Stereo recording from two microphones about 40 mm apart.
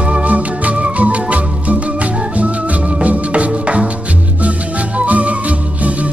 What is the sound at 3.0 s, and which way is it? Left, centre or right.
Music, right.